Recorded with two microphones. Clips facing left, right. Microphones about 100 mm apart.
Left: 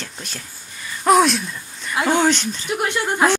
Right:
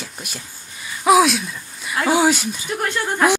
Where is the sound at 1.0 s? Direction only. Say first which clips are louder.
Right 1 dB; 5° right (ahead or behind).